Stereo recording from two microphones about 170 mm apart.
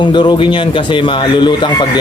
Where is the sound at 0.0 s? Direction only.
25° left (ahead or behind).